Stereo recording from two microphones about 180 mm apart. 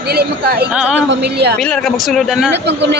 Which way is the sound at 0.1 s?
60° right (ahead or behind).